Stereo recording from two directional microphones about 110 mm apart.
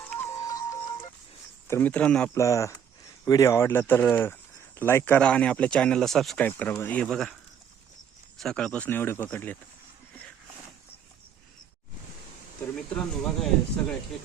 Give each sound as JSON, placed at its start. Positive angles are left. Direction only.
{"t": 0.0, "sound": "music", "side_deg": 15}
{"t": 0.3, "sound": "music", "side_deg": 35}
{"t": 1.6, "sound": "speech", "side_deg": 20}
{"t": 2.3, "sound": "speech", "side_deg": 30}
{"t": 6.4, "sound": "speech", "side_deg": 15}
{"t": 8.4, "sound": "speech", "side_deg": 5}
{"t": 12.9, "sound": "speech", "side_deg": 5}